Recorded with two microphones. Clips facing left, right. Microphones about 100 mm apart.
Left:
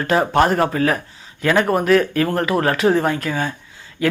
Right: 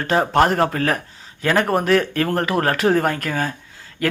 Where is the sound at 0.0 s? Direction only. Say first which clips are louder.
Left 1 dB; 35° right (ahead or behind).